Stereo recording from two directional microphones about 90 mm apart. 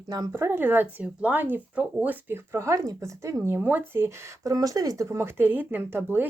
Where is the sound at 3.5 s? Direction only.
25° right (ahead or behind).